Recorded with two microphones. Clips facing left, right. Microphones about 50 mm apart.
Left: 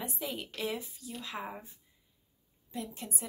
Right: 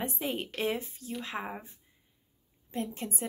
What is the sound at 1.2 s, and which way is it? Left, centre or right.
Speech, right.